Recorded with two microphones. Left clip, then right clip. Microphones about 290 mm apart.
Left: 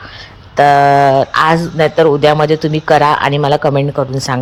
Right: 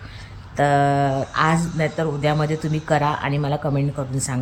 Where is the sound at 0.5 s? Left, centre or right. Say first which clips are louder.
Left 11 dB; left.